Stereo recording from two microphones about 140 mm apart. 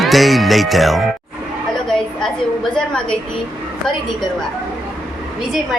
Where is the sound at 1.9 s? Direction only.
5° left (ahead or behind).